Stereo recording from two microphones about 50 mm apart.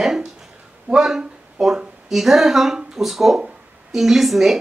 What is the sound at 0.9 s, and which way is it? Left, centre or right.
Speech, centre.